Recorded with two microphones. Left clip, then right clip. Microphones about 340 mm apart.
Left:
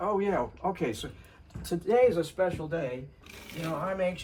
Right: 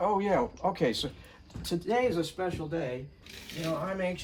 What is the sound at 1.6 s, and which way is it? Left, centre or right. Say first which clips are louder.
Speech: left 5 dB; centre.